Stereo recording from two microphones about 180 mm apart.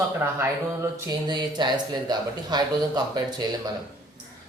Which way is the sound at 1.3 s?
25° right (ahead or behind).